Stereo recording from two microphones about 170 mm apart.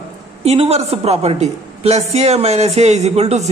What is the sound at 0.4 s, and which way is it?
Speech, 40° right (ahead or behind).